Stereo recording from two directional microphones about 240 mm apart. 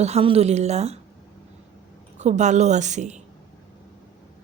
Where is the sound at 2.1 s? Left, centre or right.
Right.